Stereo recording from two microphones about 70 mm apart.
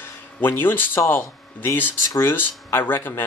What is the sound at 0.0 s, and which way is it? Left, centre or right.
A man's voice, left.